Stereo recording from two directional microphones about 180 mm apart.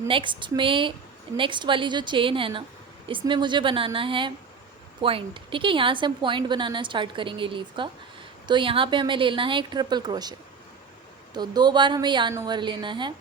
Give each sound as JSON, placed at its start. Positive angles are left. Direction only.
{"t": 0.1, "sound": "a woman's voice", "side_deg": -25}
{"t": 11.3, "sound": "a woman's voice", "side_deg": -25}